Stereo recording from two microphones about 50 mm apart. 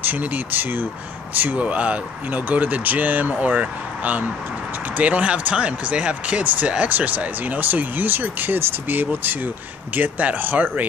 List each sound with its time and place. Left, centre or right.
0.2 s speech: right